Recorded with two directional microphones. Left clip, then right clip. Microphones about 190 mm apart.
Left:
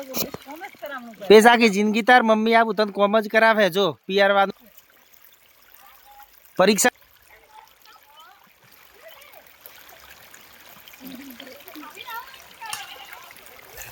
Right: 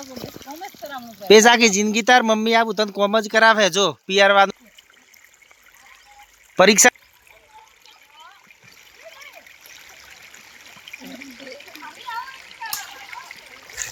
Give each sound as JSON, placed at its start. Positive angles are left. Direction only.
{"t": 1.3, "sound": "speech", "side_deg": 0}
{"t": 6.6, "sound": "speech", "side_deg": -10}
{"t": 9.6, "sound": "water", "side_deg": 45}